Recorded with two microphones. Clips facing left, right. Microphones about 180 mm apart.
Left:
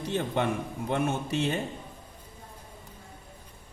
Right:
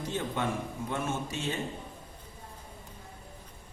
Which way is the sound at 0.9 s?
65° left (ahead or behind).